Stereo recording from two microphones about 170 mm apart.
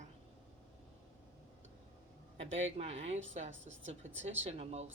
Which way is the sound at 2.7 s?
40° right (ahead or behind).